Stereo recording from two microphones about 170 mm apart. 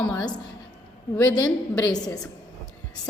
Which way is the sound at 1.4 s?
20° left (ahead or behind).